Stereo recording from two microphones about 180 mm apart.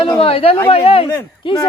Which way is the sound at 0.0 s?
30° left (ahead or behind).